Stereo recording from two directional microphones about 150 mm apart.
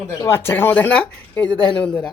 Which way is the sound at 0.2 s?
15° left (ahead or behind).